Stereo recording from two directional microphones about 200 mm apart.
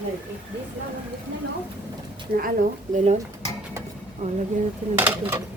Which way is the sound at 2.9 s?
35° right (ahead or behind).